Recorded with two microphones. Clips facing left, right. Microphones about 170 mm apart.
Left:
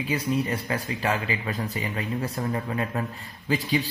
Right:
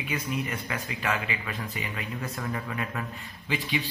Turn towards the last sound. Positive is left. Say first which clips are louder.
# left 5 dB
turn(degrees=40)  # may be behind; listen again after turning